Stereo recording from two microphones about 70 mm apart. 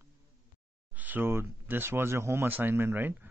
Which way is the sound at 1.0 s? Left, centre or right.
Right.